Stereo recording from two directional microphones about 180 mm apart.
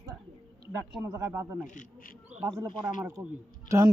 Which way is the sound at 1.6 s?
50° left (ahead or behind).